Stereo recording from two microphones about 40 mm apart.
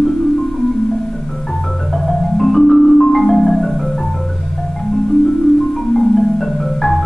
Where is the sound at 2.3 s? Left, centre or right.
Centre.